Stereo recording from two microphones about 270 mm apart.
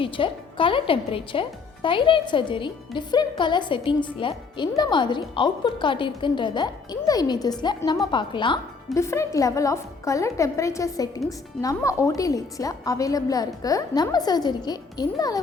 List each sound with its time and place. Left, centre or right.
0.0 s a woman's voice: centre